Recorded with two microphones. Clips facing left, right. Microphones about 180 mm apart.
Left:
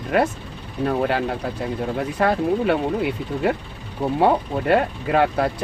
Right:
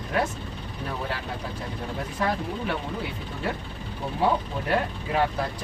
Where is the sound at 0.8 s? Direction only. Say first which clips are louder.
Left 11 dB; 65° left (ahead or behind).